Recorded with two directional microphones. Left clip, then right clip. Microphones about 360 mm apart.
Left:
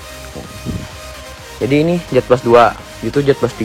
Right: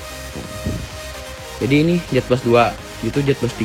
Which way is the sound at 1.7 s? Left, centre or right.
Centre.